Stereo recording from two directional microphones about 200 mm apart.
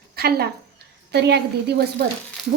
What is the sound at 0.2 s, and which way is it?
A woman's voice, 50° right (ahead or behind).